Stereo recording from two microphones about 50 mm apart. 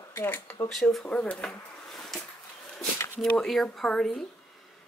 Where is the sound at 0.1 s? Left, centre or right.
Left.